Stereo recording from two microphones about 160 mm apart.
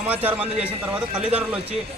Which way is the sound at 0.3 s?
10° right (ahead or behind).